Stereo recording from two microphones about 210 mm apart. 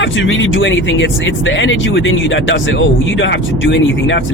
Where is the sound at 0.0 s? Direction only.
65° left (ahead or behind).